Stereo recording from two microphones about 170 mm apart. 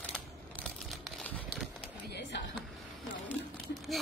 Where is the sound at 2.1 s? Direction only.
90° left.